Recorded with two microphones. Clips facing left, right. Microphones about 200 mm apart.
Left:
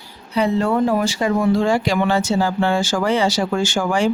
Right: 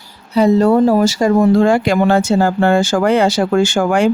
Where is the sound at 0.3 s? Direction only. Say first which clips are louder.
Right 7 dB; 40° right (ahead or behind).